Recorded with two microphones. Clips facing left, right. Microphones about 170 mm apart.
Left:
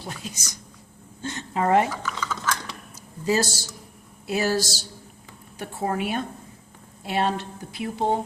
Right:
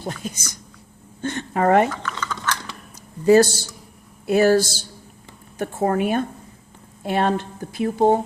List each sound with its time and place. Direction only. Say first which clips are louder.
0.0 s speech: right 6 dB; 50° right (ahead or behind)
1.9 s typing: right 1 dB; 5° left (ahead or behind)
3.2 s speech: right 10 dB; 55° right (ahead or behind)